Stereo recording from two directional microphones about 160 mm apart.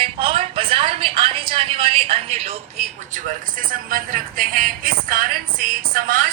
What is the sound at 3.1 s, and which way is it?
Speech, 60° right (ahead or behind).